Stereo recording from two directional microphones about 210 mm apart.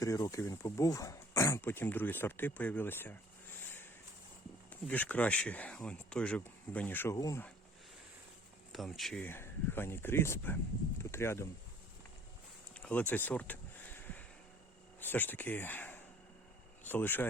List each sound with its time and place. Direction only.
0.0 s speech: 15° left (ahead or behind)
4.7 s speech: 5° left (ahead or behind)
8.7 s speech: centre (ahead or behind)
12.7 s a sound: 5° left (ahead or behind)
15.0 s speech: 10° left (ahead or behind)